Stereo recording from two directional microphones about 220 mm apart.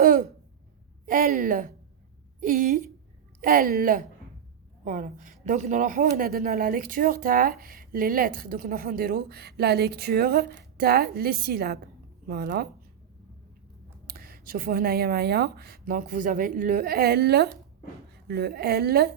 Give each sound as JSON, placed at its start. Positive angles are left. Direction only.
{"t": 0.0, "sound": "throat clearing", "side_deg": -40}
{"t": 1.0, "sound": "speech", "side_deg": -40}
{"t": 14.1, "sound": "a woman's voice", "side_deg": -40}